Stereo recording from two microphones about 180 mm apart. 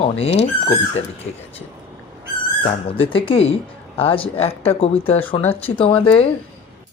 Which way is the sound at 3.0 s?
30° left (ahead or behind).